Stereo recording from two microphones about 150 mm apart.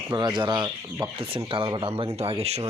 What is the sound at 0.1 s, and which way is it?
Speech, 30° right (ahead or behind).